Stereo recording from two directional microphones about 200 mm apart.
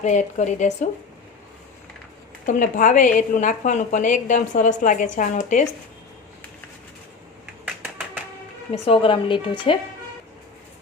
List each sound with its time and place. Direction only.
0.0 s a woman's voice: 35° left (ahead or behind)
2.5 s a woman's voice: 40° left (ahead or behind)
8.9 s a woman's voice: 25° left (ahead or behind)